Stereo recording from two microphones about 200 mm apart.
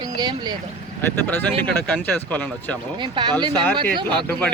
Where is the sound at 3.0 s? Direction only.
20° right (ahead or behind).